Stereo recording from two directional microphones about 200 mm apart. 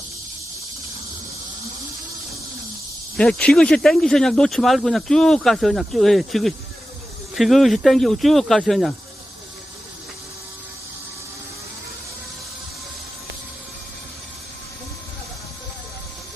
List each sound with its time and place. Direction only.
3.2 s speech: 5° left (ahead or behind)